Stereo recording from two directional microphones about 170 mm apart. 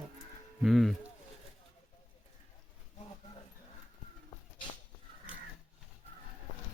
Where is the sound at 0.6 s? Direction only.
Centre (ahead or behind).